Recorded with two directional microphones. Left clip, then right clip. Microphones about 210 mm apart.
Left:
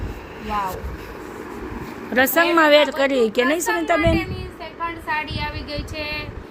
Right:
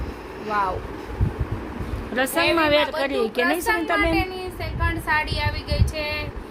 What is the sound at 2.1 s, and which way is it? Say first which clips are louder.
Speech: left 4 dB; 35° left (ahead or behind).